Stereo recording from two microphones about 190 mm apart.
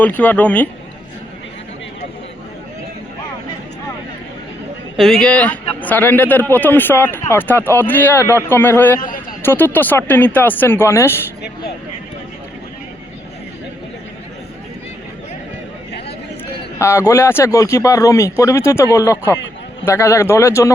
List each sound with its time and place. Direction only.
0.0 s speech: 10° left (ahead or behind)
4.9 s speech: centre (ahead or behind)
9.0 s a man's voice: 45° left (ahead or behind)
9.4 s speech: 10° left (ahead or behind)
16.7 s speech: 15° left (ahead or behind)